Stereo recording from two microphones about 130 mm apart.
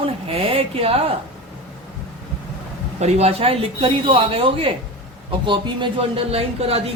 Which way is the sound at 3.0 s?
55° right (ahead or behind).